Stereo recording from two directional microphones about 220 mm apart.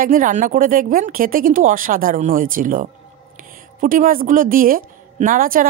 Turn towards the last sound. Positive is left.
turn(degrees=-40)  # may be behind; listen again after turning